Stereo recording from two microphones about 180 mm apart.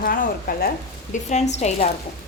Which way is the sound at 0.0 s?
50° left (ahead or behind).